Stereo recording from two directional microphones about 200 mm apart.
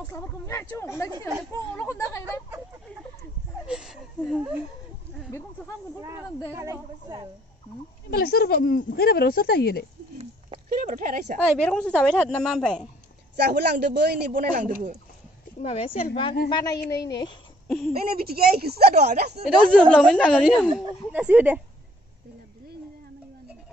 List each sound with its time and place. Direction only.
0.0 s speech: 15° left (ahead or behind)
3.6 s a sound: 5° right (ahead or behind)
4.2 s speech: 5° right (ahead or behind)
5.9 s snake: 15° right (ahead or behind)
6.5 s speech: 15° right (ahead or behind)
8.1 s speech: 50° left (ahead or behind)
10.7 s speech: 40° right (ahead or behind)
11.3 s a woman's voice: 5° left (ahead or behind)
13.4 s a man's voice: 55° right (ahead or behind)
15.6 s speech: 30° left (ahead or behind)
17.6 s speech: centre (ahead or behind)
17.9 s a man's voice: 50° right (ahead or behind)
19.9 s a woman's voice: 5° left (ahead or behind)
20.6 s speech: 5° right (ahead or behind)